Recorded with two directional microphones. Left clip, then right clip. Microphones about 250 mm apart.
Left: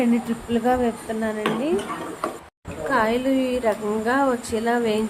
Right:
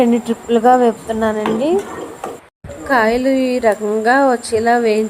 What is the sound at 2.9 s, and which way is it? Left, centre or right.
A woman's voice, centre.